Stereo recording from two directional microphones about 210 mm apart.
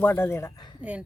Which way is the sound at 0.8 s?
5° right (ahead or behind).